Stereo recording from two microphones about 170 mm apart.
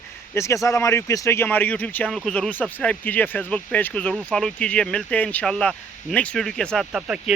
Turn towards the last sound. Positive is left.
turn(degrees=-5)  # may be behind; listen again after turning